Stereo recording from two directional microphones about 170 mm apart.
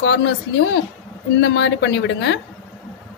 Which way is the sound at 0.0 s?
90° left.